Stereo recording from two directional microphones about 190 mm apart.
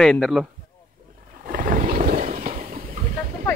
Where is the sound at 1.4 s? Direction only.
45° right (ahead or behind).